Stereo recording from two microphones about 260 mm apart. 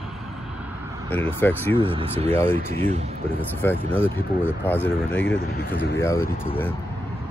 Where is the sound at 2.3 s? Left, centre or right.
Centre.